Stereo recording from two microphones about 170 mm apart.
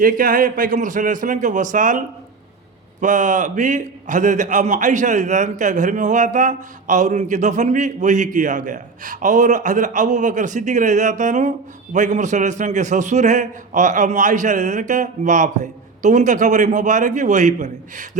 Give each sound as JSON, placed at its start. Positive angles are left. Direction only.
{"t": 0.0, "sound": "a man's voice", "side_deg": -55}
{"t": 3.0, "sound": "a man's voice", "side_deg": -45}